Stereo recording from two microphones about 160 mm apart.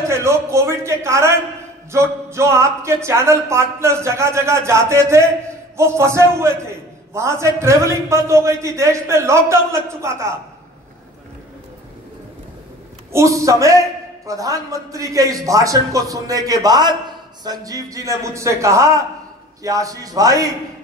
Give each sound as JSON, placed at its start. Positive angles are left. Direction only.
{"t": 0.1, "sound": "speech", "side_deg": -15}
{"t": 13.1, "sound": "a man's voice", "side_deg": -20}